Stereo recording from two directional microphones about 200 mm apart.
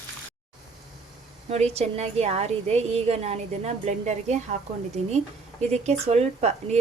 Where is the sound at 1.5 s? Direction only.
35° right (ahead or behind).